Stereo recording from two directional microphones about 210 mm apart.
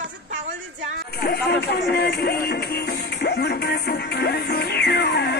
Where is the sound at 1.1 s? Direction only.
50° left (ahead or behind).